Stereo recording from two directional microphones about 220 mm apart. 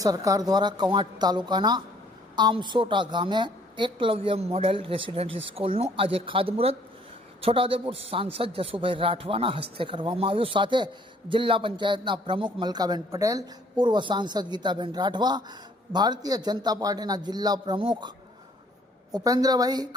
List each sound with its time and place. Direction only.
0.0 s a man's voice: 15° right (ahead or behind)
19.1 s a woman's voice: 15° right (ahead or behind)